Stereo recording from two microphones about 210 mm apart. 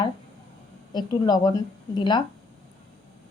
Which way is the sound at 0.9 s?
20° left (ahead or behind).